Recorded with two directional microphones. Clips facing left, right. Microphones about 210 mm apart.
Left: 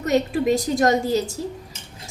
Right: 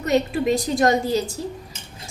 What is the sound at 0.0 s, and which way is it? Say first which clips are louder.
A woman's voice: even; 45° left (ahead or behind).